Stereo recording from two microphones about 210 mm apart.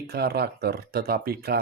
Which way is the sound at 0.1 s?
50° right (ahead or behind).